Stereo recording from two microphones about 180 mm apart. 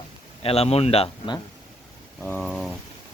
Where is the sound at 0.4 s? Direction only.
35° left (ahead or behind).